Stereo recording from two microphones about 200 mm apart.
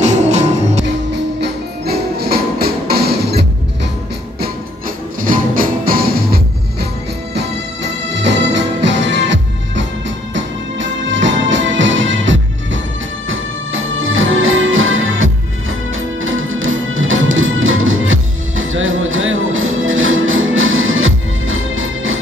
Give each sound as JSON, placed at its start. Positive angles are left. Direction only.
{"t": 0.0, "sound": "music", "side_deg": -35}
{"t": 1.4, "sound": "music", "side_deg": -50}
{"t": 5.2, "sound": "music", "side_deg": -45}
{"t": 7.3, "sound": "music", "side_deg": -65}